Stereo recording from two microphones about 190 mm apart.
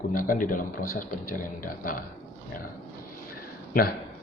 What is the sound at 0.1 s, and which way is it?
Speech, 45° left (ahead or behind).